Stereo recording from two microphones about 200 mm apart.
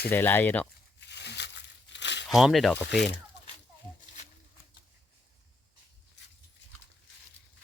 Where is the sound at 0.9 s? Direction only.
60° left (ahead or behind).